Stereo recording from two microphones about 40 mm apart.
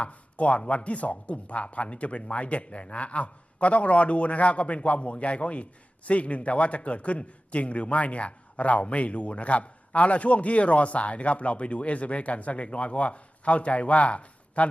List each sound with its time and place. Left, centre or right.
0.0 s a man's voice: left